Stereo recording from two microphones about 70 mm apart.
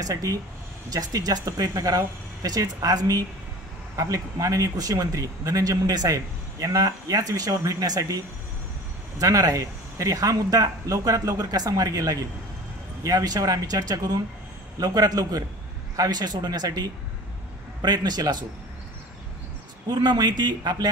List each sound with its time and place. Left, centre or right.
0.0 s speech: right
3.9 s speech: right
9.2 s speech: right
19.9 s speech: right